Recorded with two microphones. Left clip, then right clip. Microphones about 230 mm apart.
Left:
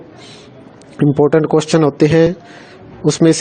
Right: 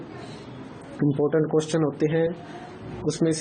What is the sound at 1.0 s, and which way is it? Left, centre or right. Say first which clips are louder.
Speech: left 11 dB; left.